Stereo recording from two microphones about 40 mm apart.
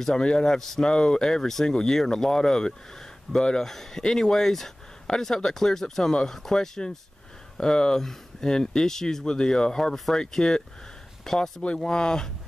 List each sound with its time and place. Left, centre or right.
0.0 s speech: left